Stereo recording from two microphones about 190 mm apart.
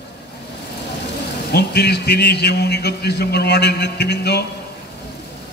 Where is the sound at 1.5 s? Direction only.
60° left (ahead or behind).